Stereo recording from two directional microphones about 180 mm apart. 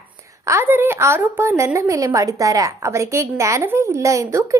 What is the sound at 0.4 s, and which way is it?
A woman's voice, 15° right (ahead or behind).